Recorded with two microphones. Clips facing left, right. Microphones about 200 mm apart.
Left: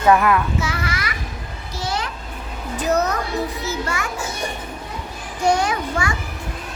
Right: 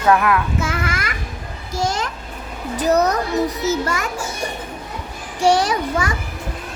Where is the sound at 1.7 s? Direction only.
45° right (ahead or behind).